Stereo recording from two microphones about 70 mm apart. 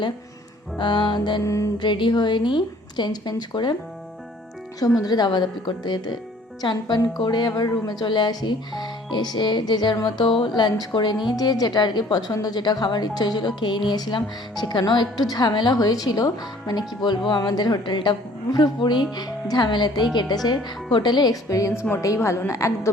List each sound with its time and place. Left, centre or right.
0.8 s speech: left
1.4 s speech: left
1.8 s speech: left
4.9 s speech: left
12.3 s speech: left
20.1 s speech: left
21.5 s speech: left
22.0 s speech: left